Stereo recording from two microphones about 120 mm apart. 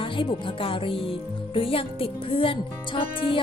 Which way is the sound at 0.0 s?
45° left (ahead or behind).